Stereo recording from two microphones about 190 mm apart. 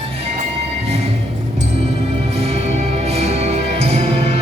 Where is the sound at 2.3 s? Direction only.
35° right (ahead or behind).